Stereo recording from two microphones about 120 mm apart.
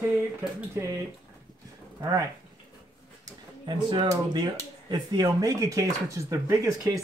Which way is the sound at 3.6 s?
40° right (ahead or behind).